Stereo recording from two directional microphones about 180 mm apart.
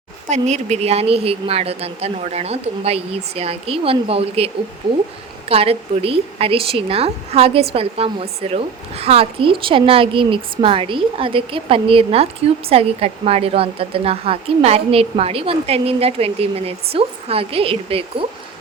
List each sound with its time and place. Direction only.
0.3 s speech: 40° right (ahead or behind)